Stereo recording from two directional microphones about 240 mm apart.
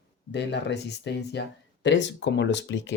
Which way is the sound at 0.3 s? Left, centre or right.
Left.